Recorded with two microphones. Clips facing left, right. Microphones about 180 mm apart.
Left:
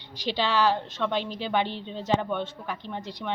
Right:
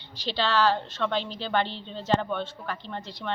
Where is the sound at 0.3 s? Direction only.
15° left (ahead or behind).